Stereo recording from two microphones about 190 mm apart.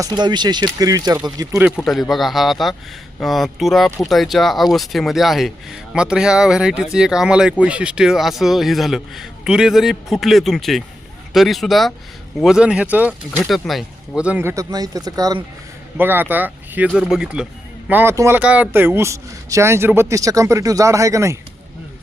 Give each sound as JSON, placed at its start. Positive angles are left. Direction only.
{"t": 0.0, "sound": "speech", "side_deg": -25}
{"t": 1.5, "sound": "speech", "side_deg": -5}